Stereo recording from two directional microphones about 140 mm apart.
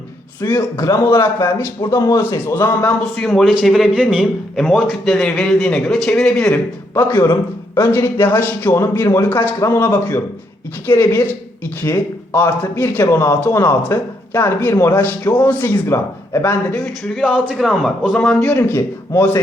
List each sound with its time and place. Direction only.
0.4 s a man's voice: 20° left (ahead or behind)
3.2 s a man's voice: centre (ahead or behind)
6.5 s a man's voice: 15° left (ahead or behind)
16.7 s a man's voice: 5° left (ahead or behind)